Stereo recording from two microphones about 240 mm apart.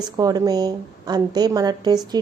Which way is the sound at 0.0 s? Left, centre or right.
Centre.